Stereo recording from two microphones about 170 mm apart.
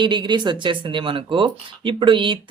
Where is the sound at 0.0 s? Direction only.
25° right (ahead or behind).